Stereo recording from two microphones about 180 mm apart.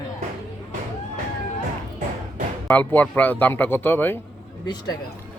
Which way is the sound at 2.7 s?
10° left (ahead or behind).